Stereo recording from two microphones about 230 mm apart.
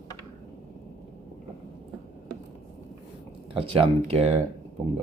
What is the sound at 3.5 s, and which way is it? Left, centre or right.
Speech, right.